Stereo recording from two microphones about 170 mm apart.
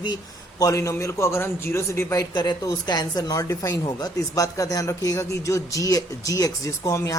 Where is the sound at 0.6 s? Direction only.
20° left (ahead or behind).